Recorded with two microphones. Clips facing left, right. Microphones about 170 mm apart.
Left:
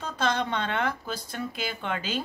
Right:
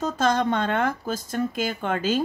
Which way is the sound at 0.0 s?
45° right (ahead or behind).